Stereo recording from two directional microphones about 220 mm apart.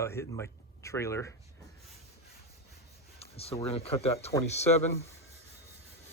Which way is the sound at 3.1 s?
25° left (ahead or behind).